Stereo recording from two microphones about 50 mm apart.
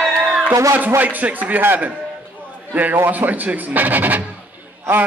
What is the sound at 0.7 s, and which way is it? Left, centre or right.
Speech, right.